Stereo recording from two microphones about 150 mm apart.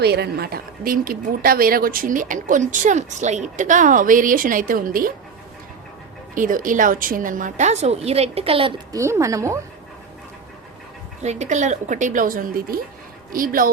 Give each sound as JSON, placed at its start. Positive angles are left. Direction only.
{"t": 0.0, "sound": "speech", "side_deg": -90}
{"t": 6.3, "sound": "speech", "side_deg": -60}
{"t": 8.9, "sound": "a woman's voice", "side_deg": -20}
{"t": 11.2, "sound": "speech", "side_deg": -50}